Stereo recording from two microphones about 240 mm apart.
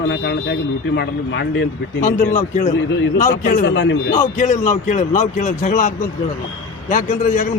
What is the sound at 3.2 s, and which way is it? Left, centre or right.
Speech, left.